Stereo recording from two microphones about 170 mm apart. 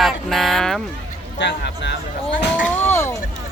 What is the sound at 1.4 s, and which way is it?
Speech, 90° left.